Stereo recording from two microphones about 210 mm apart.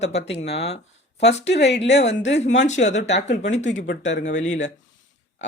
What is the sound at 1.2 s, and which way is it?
Speech, 55° left (ahead or behind).